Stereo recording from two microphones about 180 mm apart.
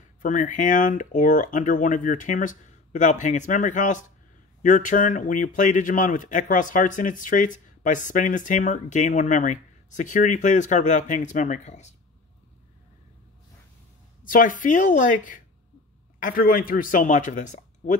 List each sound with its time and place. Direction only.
0.2 s speech: 45° left (ahead or behind)
14.2 s speech: 50° left (ahead or behind)